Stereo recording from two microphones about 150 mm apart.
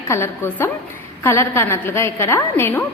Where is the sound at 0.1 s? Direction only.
15° left (ahead or behind).